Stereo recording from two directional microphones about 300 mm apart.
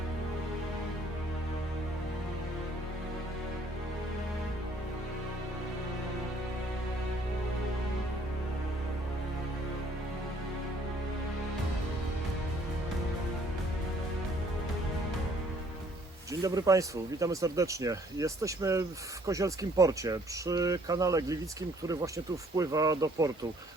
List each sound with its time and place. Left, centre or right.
16.3 s speech: centre
22.5 s speech: centre